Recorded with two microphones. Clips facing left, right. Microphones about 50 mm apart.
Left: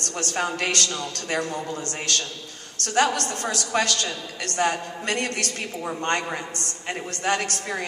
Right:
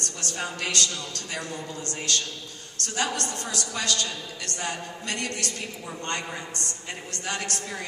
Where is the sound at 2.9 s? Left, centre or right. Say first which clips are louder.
Left 7 dB; left.